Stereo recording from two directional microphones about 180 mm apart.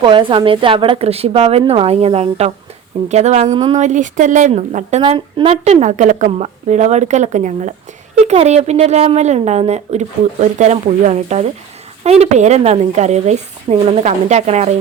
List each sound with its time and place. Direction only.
0.0 s a woman's voice: 25° right (ahead or behind)
3.5 s speech: 25° right (ahead or behind)
3.8 s a woman's voice: 40° right (ahead or behind)